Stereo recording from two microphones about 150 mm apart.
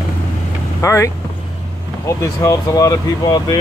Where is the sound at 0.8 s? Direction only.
20° left (ahead or behind).